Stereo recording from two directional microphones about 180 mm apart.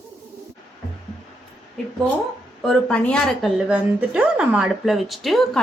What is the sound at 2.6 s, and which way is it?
Speech, 5° left (ahead or behind).